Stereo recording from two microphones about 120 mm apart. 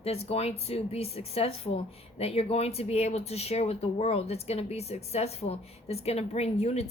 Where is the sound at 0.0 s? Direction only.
55° left (ahead or behind).